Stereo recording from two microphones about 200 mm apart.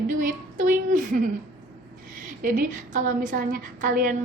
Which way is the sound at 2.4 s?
45° right (ahead or behind).